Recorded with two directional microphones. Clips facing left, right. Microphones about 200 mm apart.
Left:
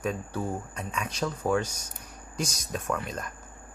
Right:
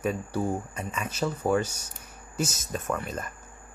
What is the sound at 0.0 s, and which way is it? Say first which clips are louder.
Speech: right 3 dB; 10° right (ahead or behind).